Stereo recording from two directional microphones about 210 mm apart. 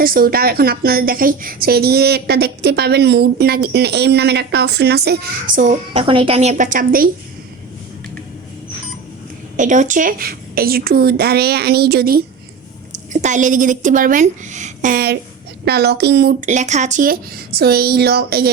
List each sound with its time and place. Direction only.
0.0 s a woman's voice: 45° right (ahead or behind)
9.6 s a woman's voice: 35° right (ahead or behind)
13.2 s a woman's voice: 35° right (ahead or behind)
16.5 s a woman's voice: 35° right (ahead or behind)